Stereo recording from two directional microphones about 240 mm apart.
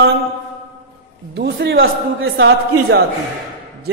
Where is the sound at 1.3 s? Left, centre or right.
Right.